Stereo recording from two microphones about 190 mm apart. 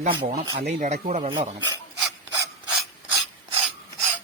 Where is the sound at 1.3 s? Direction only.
25° right (ahead or behind).